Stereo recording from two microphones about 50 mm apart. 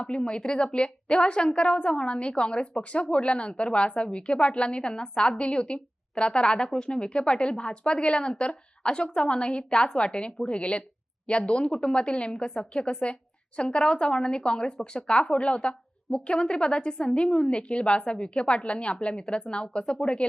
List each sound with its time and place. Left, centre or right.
0.0 s a woman's voice: centre